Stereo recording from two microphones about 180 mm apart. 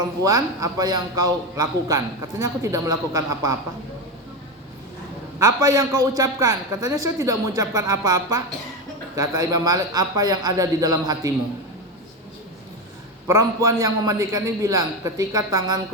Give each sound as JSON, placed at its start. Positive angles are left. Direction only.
{"t": 0.2, "sound": "a man's voice", "side_deg": -20}
{"t": 5.4, "sound": "a man's voice", "side_deg": -20}
{"t": 13.2, "sound": "a man's voice", "side_deg": -20}